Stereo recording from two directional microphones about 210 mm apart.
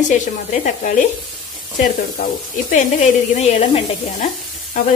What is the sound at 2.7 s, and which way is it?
Speech, 35° left (ahead or behind).